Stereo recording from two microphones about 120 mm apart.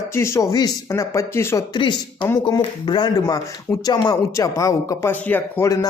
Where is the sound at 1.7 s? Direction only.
40° left (ahead or behind).